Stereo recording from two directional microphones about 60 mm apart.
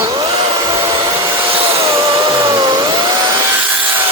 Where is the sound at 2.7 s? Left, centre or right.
Right.